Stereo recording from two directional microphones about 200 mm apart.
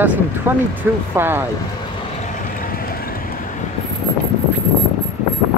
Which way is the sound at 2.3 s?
40° left (ahead or behind).